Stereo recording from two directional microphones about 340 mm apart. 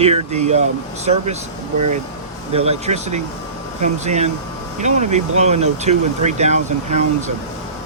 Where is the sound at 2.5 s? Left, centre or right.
Centre.